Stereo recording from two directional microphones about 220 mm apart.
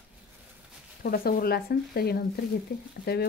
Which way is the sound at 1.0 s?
40° left (ahead or behind).